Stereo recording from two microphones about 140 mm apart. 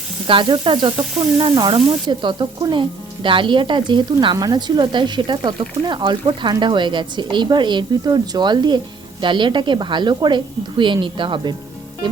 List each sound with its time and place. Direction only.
0.3 s speech: 35° right (ahead or behind)